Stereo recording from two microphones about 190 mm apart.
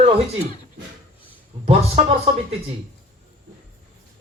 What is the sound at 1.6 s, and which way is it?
Speech, 30° right (ahead or behind).